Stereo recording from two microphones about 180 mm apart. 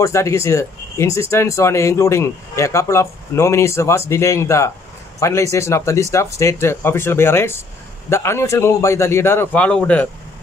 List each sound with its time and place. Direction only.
0.0 s speech: 15° left (ahead or behind)